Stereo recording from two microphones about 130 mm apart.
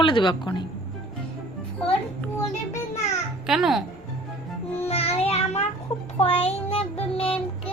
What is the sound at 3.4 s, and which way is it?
Speech, 5° right (ahead or behind).